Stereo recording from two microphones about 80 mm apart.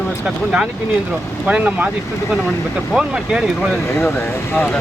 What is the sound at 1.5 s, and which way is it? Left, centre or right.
Speech, centre.